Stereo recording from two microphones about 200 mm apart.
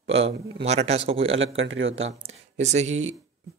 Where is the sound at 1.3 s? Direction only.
70° right (ahead or behind).